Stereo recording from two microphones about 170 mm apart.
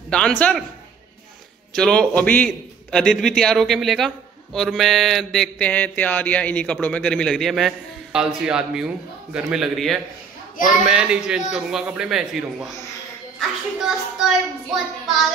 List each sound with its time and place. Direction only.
0.1 s mantra: 5° left (ahead or behind)
1.7 s mantra: 5° left (ahead or behind)